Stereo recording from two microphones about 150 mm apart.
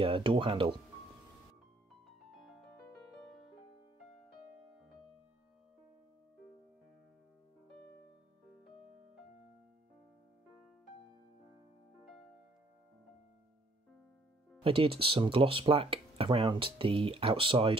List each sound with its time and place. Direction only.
0.0 s speech: 35° right (ahead or behind)
14.6 s speech: 35° right (ahead or behind)